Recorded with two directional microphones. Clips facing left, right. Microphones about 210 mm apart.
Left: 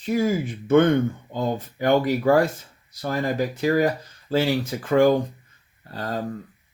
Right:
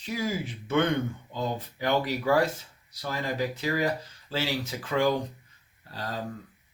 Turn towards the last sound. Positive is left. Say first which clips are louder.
# left 6 dB
turn(degrees=50)  # may be behind; listen again after turning